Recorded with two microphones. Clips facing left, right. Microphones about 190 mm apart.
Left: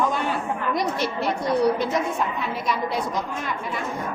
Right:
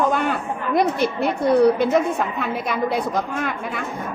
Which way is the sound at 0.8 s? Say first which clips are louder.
Right 10 dB; 55° right (ahead or behind).